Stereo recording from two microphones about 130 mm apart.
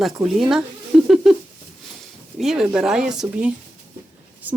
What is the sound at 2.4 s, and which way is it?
Speech, 5° right (ahead or behind).